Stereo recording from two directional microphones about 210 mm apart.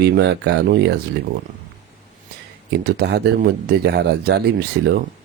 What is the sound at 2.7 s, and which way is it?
Speech, 50° right (ahead or behind).